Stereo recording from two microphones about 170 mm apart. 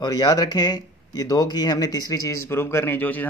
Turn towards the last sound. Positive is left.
turn(degrees=10)  # may be behind; listen again after turning